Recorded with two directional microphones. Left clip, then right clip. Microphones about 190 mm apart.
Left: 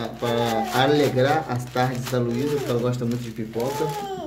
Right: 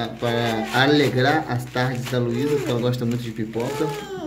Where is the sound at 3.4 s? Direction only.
35° right (ahead or behind).